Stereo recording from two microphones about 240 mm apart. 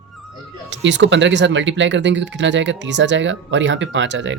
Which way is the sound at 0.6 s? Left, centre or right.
Right.